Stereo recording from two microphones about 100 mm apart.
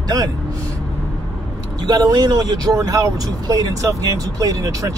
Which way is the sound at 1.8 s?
40° right (ahead or behind).